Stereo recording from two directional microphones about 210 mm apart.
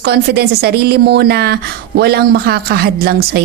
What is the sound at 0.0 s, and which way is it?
A woman's voice, 50° right (ahead or behind).